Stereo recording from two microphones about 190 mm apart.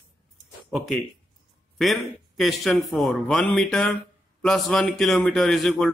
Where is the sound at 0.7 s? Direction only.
Centre (ahead or behind).